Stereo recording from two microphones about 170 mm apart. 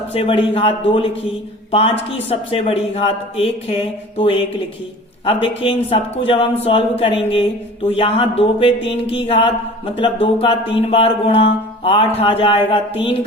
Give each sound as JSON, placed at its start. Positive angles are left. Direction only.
{"t": 0.1, "sound": "speech", "side_deg": 30}
{"t": 5.2, "sound": "speech", "side_deg": 35}